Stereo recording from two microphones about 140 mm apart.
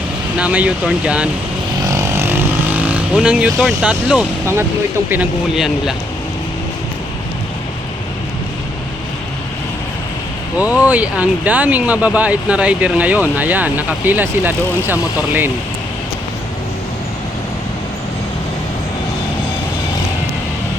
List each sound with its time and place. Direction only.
0.3 s speech: 10° right (ahead or behind)
1.9 s vehicle: 20° right (ahead or behind); by 3.8 s centre (ahead or behind)
4.2 s speech: 15° right (ahead or behind)
10.6 s speech: 10° right (ahead or behind)